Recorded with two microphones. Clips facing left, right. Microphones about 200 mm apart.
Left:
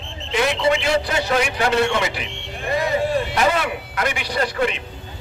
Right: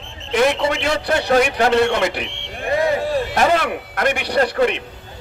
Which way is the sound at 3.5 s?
55° right (ahead or behind).